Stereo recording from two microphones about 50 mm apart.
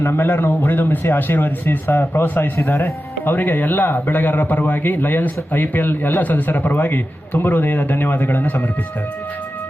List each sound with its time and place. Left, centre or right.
0.0 s a man's voice: left